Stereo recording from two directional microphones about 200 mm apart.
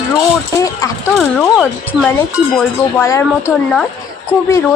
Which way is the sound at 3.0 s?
15° left (ahead or behind).